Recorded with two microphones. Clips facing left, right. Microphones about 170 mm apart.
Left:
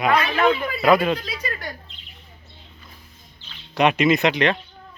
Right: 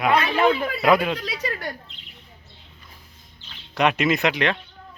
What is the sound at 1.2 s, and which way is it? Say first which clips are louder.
Speech: right 2 dB; 70° right (ahead or behind).